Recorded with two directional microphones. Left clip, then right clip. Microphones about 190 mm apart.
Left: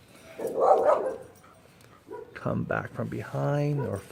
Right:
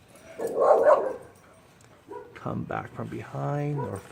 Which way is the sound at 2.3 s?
25° left (ahead or behind).